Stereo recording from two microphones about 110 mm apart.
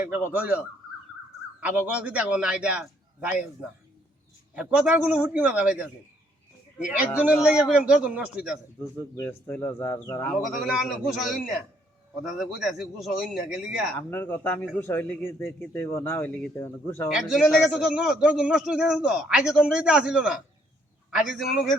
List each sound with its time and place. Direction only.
0.0 s a man's voice: 15° right (ahead or behind)
1.6 s a man's voice: 15° right (ahead or behind)
4.5 s a man's voice: 10° right (ahead or behind)
7.3 s a man's voice: 10° right (ahead or behind)
9.0 s speech: 25° left (ahead or behind)
10.3 s a man's voice: 5° right (ahead or behind)
13.9 s a man's voice: 15° left (ahead or behind)
17.1 s a man's voice: 5° right (ahead or behind)